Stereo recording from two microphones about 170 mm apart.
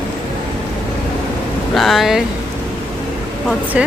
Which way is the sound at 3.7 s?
5° right (ahead or behind).